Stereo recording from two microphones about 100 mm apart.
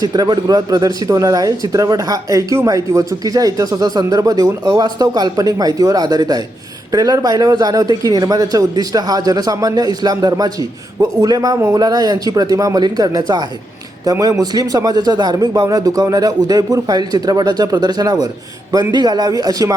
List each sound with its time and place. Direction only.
0.0 s speech: 45° right (ahead or behind)